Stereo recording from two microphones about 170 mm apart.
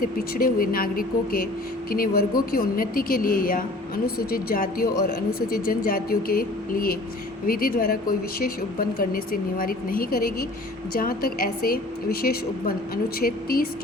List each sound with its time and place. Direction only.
0.0 s a woman's voice: 55° left (ahead or behind)